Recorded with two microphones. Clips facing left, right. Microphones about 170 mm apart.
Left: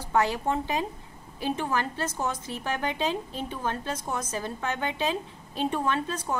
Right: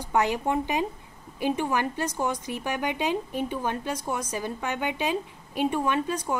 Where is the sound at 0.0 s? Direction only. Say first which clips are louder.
Right 1 dB; 15° right (ahead or behind).